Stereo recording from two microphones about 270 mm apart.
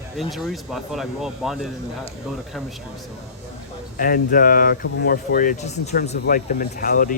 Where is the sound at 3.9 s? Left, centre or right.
Left.